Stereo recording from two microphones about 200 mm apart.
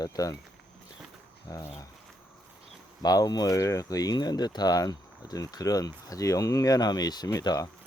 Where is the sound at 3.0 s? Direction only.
20° left (ahead or behind).